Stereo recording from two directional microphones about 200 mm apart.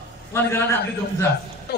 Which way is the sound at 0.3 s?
10° left (ahead or behind).